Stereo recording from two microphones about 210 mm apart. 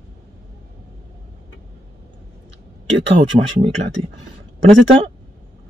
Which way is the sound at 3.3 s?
20° right (ahead or behind).